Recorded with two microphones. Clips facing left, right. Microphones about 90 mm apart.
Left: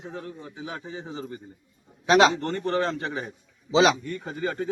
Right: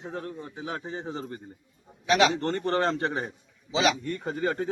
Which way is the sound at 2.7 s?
40° right (ahead or behind).